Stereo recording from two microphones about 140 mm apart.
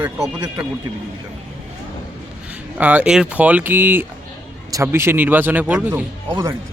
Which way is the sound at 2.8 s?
10° right (ahead or behind).